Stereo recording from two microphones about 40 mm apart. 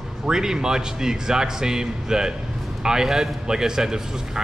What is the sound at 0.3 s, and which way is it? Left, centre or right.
Speech, centre.